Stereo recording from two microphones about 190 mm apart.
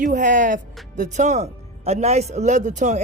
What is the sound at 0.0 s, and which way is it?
Speech, 40° right (ahead or behind).